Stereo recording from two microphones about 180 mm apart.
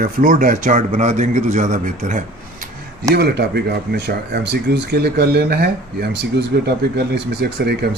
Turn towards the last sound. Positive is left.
turn(degrees=-65)  # may be behind; listen again after turning